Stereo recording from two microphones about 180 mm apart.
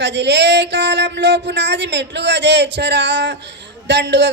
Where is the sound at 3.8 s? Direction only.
80° right.